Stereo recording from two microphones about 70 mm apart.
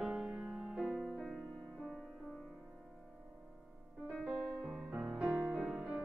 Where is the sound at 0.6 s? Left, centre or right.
Centre.